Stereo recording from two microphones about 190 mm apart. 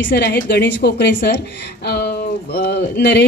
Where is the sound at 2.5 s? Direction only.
60° left (ahead or behind).